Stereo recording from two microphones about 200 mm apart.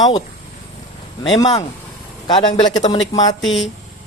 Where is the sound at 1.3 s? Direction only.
20° left (ahead or behind).